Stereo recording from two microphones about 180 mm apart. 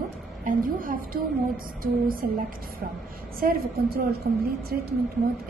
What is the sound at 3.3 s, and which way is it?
A woman's voice, 55° right (ahead or behind).